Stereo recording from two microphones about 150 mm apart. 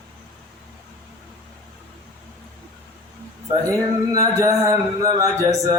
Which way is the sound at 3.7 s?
20° right (ahead or behind).